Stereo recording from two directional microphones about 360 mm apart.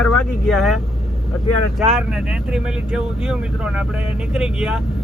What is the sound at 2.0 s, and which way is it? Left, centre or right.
Speech, centre.